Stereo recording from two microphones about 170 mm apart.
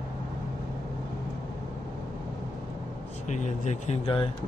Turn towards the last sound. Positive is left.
turn(degrees=35)  # may be behind; listen again after turning